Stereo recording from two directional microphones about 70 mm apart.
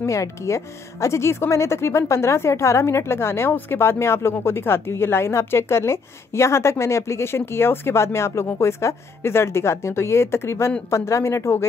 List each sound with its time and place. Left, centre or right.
0.0 s a woman's voice: left